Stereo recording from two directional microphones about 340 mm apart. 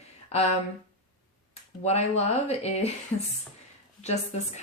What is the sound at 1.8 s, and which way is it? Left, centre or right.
Speech, centre.